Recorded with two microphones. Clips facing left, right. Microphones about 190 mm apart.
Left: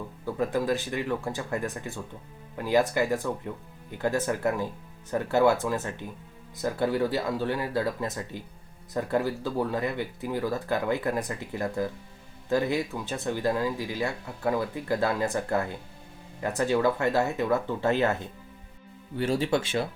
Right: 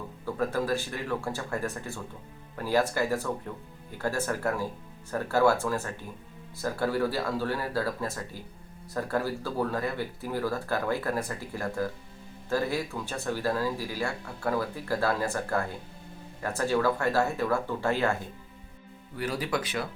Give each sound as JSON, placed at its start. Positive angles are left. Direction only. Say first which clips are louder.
{"t": 0.3, "sound": "speech", "louder": "left 2 dB", "side_deg": 15}